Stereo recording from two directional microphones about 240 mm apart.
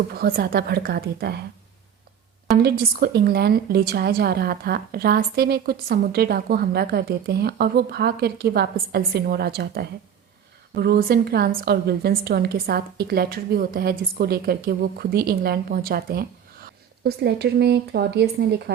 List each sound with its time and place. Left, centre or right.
0.1 s a woman's voice: right
2.6 s a woman's voice: right